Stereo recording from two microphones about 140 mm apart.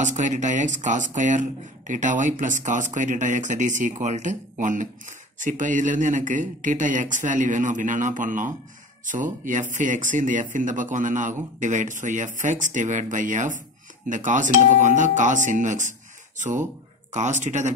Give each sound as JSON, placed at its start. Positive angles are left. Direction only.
{"t": 0.0, "sound": "a man's voice", "side_deg": -60}